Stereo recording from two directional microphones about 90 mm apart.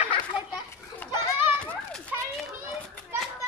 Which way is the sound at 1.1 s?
25° right (ahead or behind).